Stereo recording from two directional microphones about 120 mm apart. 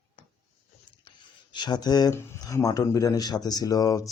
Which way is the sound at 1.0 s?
40° left (ahead or behind).